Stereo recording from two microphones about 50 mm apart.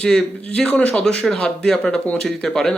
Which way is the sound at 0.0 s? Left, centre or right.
Centre.